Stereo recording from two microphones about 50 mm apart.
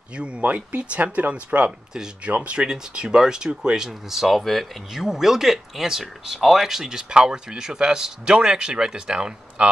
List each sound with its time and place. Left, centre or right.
0.1 s speech: right
2.2 s speech: right